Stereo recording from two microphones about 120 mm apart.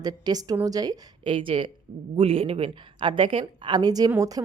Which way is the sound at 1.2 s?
45° right (ahead or behind).